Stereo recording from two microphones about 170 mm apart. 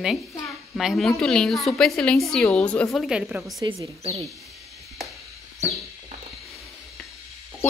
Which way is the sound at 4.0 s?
40° right (ahead or behind).